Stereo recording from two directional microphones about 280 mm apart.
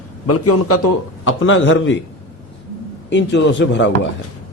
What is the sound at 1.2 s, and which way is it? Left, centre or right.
Speech, left.